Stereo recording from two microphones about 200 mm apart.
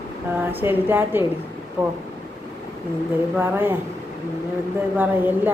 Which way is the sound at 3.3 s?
10° right (ahead or behind).